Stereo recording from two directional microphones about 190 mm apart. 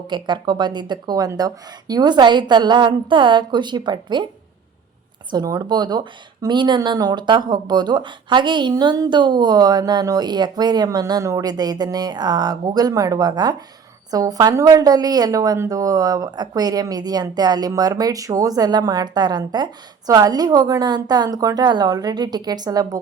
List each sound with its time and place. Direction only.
0.1 s a woman's voice: 25° right (ahead or behind)
5.3 s a woman's voice: 20° right (ahead or behind)